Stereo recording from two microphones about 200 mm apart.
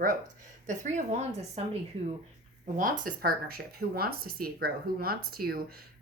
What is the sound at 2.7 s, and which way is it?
A woman's voice, 40° right (ahead or behind).